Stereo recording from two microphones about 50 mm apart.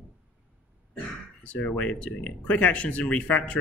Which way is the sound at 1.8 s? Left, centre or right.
Left.